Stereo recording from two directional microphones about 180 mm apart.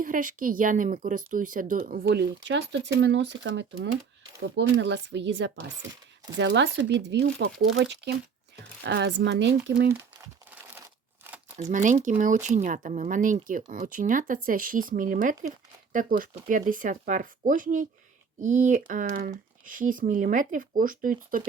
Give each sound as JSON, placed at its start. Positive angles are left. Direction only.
{"t": 0.0, "sound": "speech", "side_deg": -50}
{"t": 4.4, "sound": "speech", "side_deg": -85}
{"t": 9.9, "sound": "crumpling", "side_deg": -15}
{"t": 11.7, "sound": "speech", "side_deg": -45}